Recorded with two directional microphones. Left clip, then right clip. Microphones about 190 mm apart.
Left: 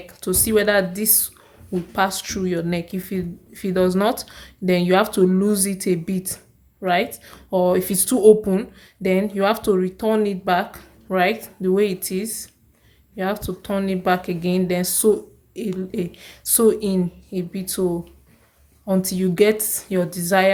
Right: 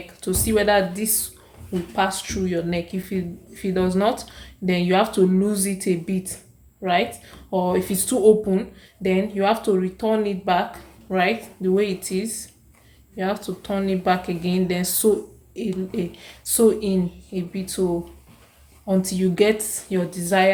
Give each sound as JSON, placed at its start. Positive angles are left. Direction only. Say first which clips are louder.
{"t": 0.1, "sound": "speech", "louder": "left 2 dB", "side_deg": 40}
{"t": 18.9, "sound": "speech", "louder": "left 1 dB", "side_deg": 35}